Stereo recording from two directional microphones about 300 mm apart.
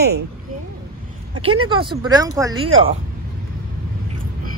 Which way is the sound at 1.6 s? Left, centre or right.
Centre.